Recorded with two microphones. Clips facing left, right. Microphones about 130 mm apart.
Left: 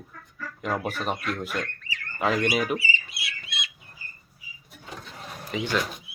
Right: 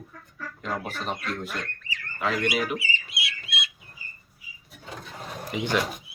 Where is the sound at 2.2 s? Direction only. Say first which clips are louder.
Left 2 dB; 25° left (ahead or behind).